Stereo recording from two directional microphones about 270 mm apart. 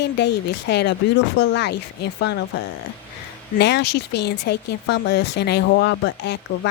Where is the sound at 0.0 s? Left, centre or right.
Left.